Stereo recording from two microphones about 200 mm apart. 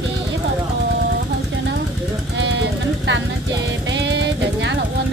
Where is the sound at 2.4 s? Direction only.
60° right (ahead or behind).